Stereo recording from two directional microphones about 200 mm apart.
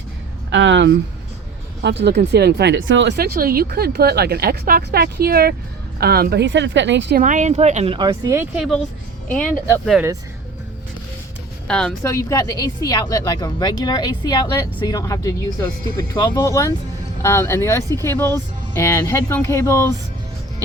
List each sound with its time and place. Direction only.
0.5 s a woman's voice: 65° right (ahead or behind)
2.0 s a woman's voice: 55° right (ahead or behind)
7.2 s speech: 40° right (ahead or behind); by 8.4 s 15° right (ahead or behind)
8.5 s a woman's voice: centre (ahead or behind)
11.7 s speech: 5° left (ahead or behind)
12.0 s a woman's voice: 15° left (ahead or behind)